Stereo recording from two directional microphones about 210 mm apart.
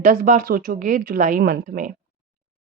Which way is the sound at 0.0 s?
40° right (ahead or behind).